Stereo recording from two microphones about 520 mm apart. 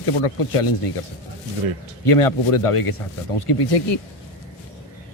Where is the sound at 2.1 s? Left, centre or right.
Left.